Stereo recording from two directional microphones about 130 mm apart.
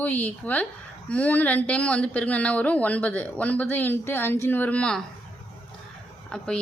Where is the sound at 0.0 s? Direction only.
10° left (ahead or behind).